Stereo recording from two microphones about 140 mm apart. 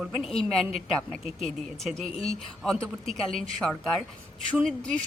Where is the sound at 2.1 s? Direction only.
45° left (ahead or behind).